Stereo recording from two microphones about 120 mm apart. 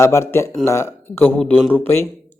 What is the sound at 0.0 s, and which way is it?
Speech, 20° left (ahead or behind).